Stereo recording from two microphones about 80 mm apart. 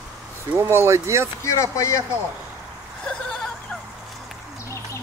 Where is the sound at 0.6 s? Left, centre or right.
Right.